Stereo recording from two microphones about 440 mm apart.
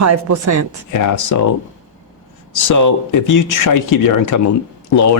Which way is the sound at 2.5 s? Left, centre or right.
Left.